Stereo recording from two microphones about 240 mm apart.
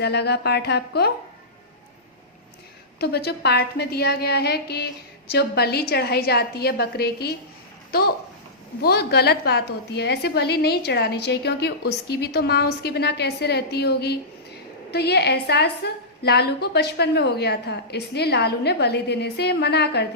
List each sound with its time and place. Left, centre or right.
0.0 s a woman's voice: left
3.0 s a woman's voice: left